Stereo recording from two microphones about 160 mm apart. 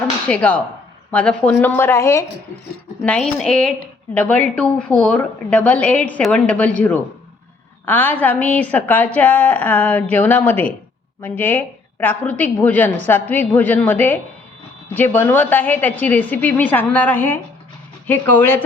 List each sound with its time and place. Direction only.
0.3 s a woman's voice: 10° left (ahead or behind)
3.0 s a woman's voice: 5° left (ahead or behind)